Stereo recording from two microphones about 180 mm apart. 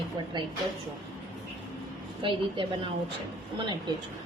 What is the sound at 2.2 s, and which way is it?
Speech, 30° right (ahead or behind).